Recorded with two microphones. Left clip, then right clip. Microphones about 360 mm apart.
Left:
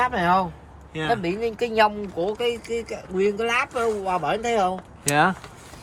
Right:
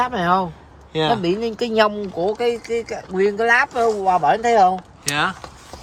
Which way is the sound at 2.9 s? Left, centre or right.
Right.